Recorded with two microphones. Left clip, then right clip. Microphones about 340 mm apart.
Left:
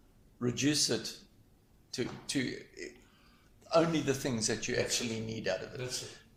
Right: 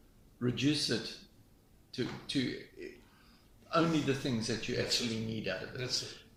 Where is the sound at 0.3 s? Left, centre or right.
Centre.